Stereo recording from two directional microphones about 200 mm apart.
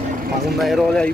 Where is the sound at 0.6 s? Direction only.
Centre (ahead or behind).